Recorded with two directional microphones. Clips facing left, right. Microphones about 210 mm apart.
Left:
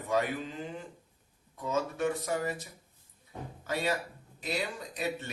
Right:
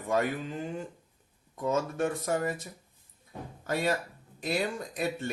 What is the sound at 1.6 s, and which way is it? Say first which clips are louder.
Speech: right 3 dB; 50° right (ahead or behind).